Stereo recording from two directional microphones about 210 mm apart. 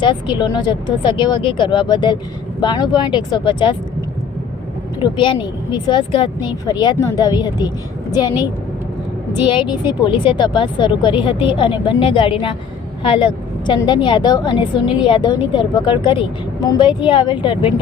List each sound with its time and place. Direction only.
0.0 s a woman's voice: 20° left (ahead or behind)
4.9 s a woman's voice: 20° left (ahead or behind)
9.3 s a woman's voice: 20° left (ahead or behind)